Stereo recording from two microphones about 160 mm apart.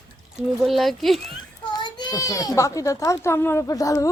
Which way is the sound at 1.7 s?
25° left (ahead or behind).